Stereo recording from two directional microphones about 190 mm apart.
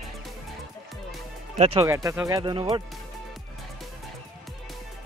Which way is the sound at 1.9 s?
15° right (ahead or behind).